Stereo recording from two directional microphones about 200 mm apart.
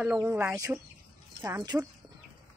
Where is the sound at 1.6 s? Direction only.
20° right (ahead or behind).